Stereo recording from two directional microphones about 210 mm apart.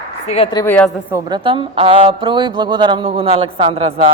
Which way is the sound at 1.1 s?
25° right (ahead or behind).